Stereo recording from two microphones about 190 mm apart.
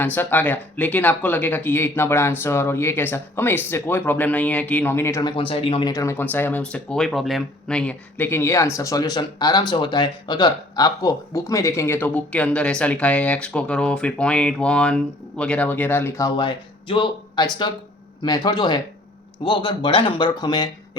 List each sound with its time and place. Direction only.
0.0 s speech: 10° left (ahead or behind)
5.3 s speech: 30° left (ahead or behind)
5.9 s speech: 15° left (ahead or behind)